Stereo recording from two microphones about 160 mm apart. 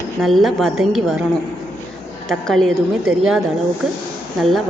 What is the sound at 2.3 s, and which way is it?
A woman's voice, centre (ahead or behind).